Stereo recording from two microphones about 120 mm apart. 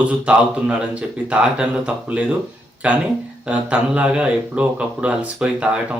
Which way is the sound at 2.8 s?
10° right (ahead or behind).